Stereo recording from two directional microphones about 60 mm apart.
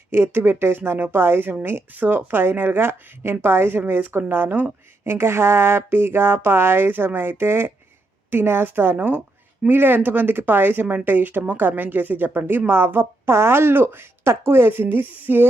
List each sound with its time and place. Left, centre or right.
0.1 s speech: right